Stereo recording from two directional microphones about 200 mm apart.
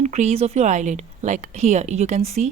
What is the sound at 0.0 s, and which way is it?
A woman's voice, 35° right (ahead or behind).